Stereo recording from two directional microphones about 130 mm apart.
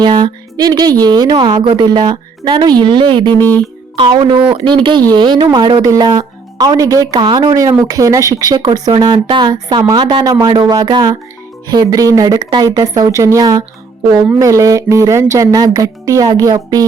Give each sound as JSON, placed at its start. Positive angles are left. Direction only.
{"t": 0.0, "sound": "speech", "side_deg": -35}
{"t": 3.2, "sound": "music", "side_deg": 15}
{"t": 3.9, "sound": "speech", "side_deg": -40}